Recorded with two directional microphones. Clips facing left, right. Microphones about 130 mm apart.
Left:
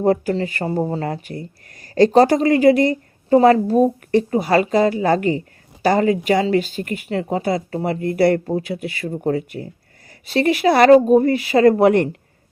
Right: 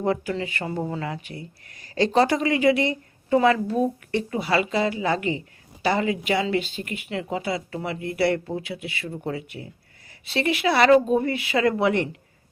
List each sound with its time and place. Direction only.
0.0 s speech: 40° left (ahead or behind)